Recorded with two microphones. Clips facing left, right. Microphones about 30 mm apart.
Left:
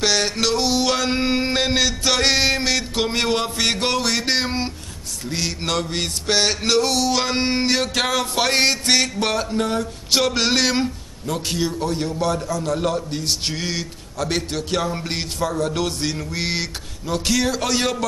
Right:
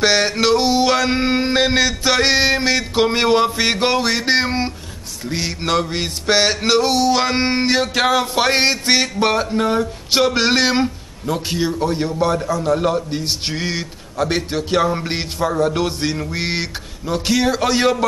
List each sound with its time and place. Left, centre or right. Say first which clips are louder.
0.0 s male singing: right 4 dB; centre
12.7 s male singing: right 4 dB; centre